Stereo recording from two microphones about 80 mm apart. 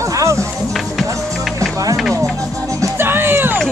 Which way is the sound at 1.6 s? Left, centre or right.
Right.